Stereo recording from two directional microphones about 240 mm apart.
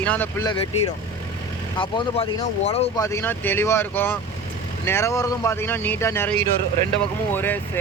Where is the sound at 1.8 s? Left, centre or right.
Left.